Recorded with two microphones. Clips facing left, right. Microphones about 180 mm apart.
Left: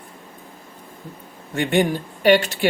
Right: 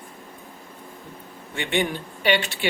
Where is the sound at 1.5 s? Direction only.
45° left (ahead or behind).